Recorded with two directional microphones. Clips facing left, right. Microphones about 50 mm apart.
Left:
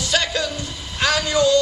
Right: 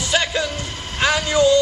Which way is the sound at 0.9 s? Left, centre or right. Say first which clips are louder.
Right 2 dB; centre.